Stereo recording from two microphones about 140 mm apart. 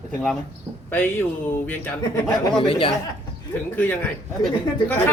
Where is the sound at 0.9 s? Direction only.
15° left (ahead or behind).